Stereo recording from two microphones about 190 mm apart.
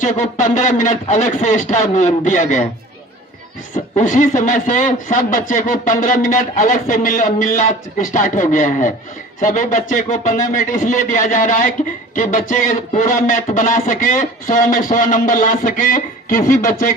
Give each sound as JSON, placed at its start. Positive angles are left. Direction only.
{"t": 0.0, "sound": "speech", "side_deg": 40}
{"t": 3.9, "sound": "speech", "side_deg": 40}